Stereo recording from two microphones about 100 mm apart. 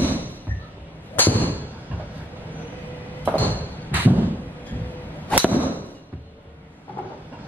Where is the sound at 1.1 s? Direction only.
20° left (ahead or behind).